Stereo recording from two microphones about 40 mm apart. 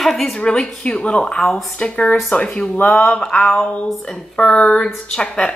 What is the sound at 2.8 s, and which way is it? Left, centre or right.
Speech, left.